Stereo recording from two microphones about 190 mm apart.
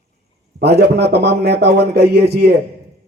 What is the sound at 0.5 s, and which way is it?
Music, 60° right (ahead or behind).